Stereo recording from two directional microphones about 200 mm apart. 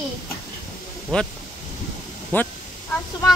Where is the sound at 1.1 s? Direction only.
5° left (ahead or behind).